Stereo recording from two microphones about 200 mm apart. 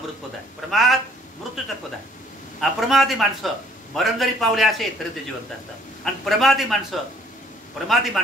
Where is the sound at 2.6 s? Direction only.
Centre (ahead or behind).